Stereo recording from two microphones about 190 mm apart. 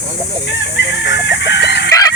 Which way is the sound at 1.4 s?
65° left (ahead or behind).